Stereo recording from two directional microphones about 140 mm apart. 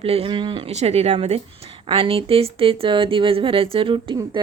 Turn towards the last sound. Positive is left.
turn(degrees=-40)  # may be behind; listen again after turning